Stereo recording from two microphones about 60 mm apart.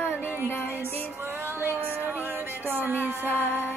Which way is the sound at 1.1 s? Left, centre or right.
Right.